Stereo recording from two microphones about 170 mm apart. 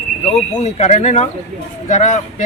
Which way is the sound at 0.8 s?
40° left (ahead or behind).